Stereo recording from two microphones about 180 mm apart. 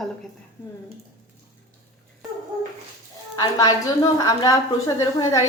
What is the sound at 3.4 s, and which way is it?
A woman's voice, 20° left (ahead or behind).